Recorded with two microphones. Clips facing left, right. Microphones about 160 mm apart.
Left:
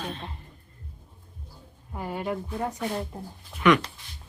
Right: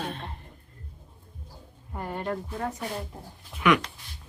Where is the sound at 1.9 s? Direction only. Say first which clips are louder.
Left 1 dB; 5° left (ahead or behind).